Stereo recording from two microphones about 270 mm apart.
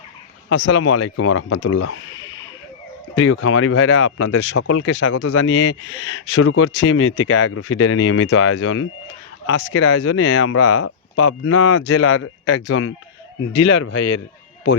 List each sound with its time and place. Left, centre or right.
0.4 s speech: left
3.2 s speech: left
5.5 s speech: left
13.7 s speech: left